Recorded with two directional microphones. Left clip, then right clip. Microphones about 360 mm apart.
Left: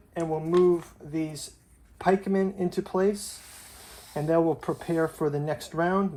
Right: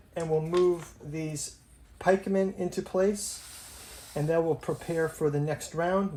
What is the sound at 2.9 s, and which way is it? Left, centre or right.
Speech, centre.